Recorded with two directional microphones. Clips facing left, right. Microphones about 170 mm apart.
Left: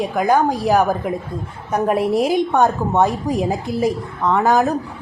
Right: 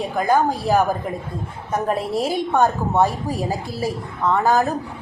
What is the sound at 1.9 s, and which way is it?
A woman's voice, 15° left (ahead or behind).